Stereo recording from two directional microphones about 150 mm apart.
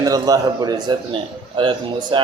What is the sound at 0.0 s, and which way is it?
A man's voice, 25° right (ahead or behind).